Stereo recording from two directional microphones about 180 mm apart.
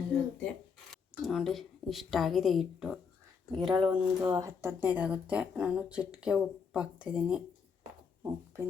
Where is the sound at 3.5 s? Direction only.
25° right (ahead or behind).